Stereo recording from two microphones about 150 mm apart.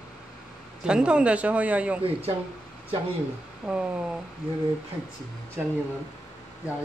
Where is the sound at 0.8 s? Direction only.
5° right (ahead or behind).